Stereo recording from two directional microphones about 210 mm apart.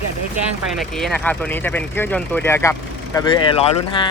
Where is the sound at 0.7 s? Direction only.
Centre (ahead or behind).